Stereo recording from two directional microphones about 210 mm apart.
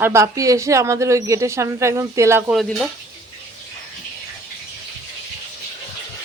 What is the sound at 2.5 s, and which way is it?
Speech, centre (ahead or behind).